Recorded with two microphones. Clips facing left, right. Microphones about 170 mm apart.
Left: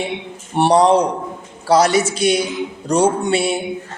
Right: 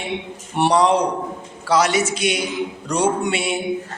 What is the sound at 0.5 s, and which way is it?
Speech, 30° left (ahead or behind).